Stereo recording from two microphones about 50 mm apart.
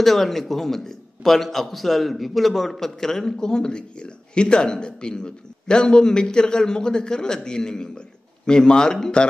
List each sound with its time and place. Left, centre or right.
0.0 s a man's voice: centre